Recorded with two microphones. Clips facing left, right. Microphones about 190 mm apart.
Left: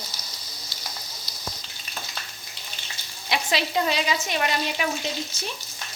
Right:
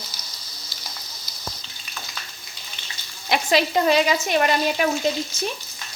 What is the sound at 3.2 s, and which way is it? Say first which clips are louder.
Speech: right 6 dB; 50° right (ahead or behind).